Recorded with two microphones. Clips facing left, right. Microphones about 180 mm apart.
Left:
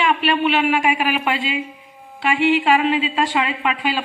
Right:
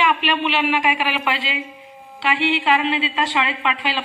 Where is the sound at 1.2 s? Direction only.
45° left (ahead or behind).